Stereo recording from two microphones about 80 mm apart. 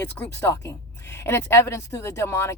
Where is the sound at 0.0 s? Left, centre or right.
Left.